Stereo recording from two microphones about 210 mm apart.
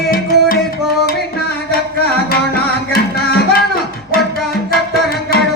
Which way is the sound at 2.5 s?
45° left (ahead or behind).